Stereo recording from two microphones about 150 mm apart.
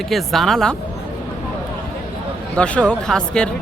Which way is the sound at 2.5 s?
5° left (ahead or behind).